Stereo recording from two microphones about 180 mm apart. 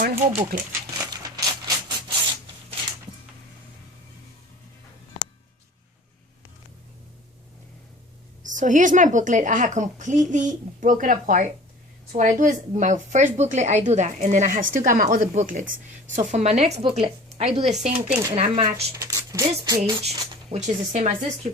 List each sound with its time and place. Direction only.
0.0 s speech: 50° right (ahead or behind)
0.7 s a sound: 20° right (ahead or behind)
8.5 s speech: 45° right (ahead or behind)
18.9 s speech: 20° right (ahead or behind)
19.8 s speech: 35° right (ahead or behind)